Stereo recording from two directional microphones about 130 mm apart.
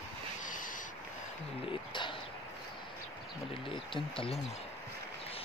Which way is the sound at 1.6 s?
40° left (ahead or behind).